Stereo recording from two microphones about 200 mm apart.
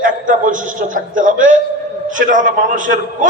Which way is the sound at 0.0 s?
40° right (ahead or behind).